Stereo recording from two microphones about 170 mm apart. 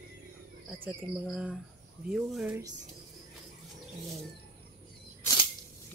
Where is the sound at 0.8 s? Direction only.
5° right (ahead or behind).